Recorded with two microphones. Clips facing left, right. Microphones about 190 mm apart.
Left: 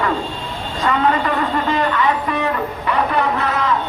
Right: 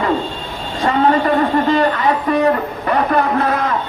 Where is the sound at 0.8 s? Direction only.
35° right (ahead or behind).